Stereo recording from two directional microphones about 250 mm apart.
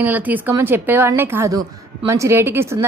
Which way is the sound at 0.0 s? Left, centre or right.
Centre.